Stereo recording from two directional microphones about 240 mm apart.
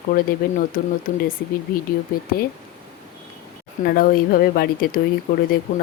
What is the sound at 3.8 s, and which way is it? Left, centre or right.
Speech, left.